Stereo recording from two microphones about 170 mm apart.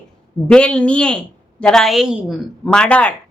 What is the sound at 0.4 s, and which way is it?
A woman's voice, 5° left (ahead or behind).